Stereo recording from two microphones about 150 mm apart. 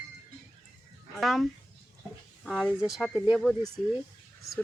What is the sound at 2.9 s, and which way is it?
Speech, 5° right (ahead or behind).